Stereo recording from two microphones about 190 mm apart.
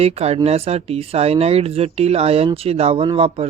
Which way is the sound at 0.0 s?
35° right (ahead or behind).